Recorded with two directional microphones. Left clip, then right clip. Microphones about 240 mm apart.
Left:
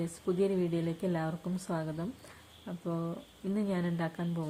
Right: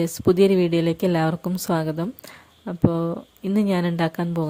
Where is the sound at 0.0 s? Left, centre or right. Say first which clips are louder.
Right 14 dB; right.